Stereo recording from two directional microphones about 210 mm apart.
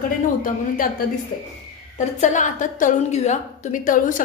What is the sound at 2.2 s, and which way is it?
A woman's voice, 35° left (ahead or behind).